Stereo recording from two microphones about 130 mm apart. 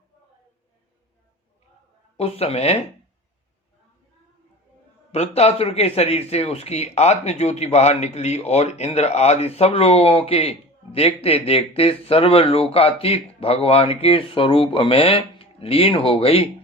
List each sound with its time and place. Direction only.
2.1 s speech: 50° left (ahead or behind)
5.1 s speech: 55° left (ahead or behind)